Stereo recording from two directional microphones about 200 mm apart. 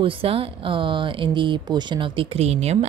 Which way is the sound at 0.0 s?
25° right (ahead or behind).